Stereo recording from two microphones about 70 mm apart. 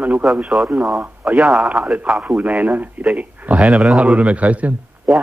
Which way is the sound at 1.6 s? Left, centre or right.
Centre.